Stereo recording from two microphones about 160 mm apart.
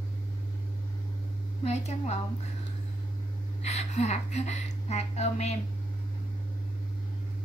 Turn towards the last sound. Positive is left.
turn(degrees=45)  # may be behind; listen again after turning